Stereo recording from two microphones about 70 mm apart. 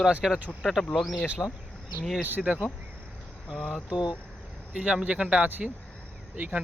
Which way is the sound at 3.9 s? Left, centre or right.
Left.